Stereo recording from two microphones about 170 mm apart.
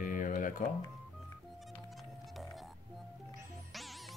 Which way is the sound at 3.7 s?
Centre (ahead or behind).